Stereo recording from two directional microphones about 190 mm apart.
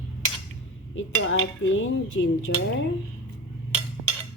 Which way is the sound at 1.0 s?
90° left.